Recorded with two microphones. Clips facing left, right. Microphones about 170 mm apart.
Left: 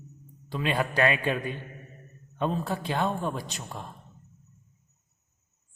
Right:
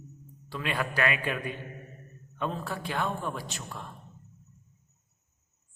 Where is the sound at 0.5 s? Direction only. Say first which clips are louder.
Left 4 dB; 25° left (ahead or behind).